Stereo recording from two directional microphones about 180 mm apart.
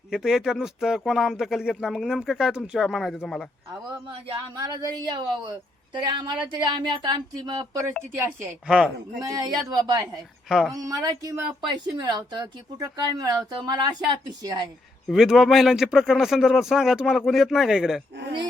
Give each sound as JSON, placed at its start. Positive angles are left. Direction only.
{"t": 0.1, "sound": "speech", "side_deg": 0}
{"t": 3.7, "sound": "speech", "side_deg": -25}
{"t": 8.1, "sound": "speech", "side_deg": -10}
{"t": 9.2, "sound": "speech", "side_deg": -20}
{"t": 15.0, "sound": "speech", "side_deg": 0}